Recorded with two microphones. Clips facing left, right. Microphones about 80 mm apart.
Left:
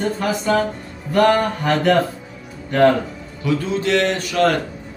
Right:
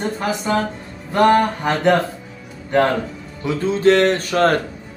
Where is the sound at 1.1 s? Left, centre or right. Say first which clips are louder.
Right 1 dB; centre.